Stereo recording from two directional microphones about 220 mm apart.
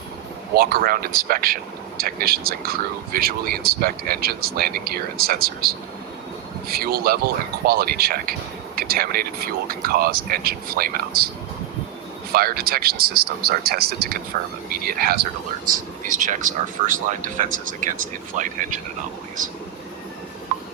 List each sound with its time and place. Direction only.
0.5 s speech: 45° right (ahead or behind)
12.3 s speech: 40° right (ahead or behind)